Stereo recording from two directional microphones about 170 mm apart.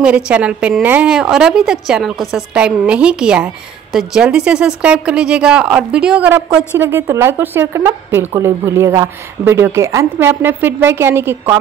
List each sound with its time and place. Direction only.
0.0 s a woman's voice: 5° right (ahead or behind)